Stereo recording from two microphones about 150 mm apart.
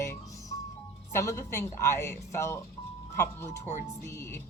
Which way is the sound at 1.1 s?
20° left (ahead or behind).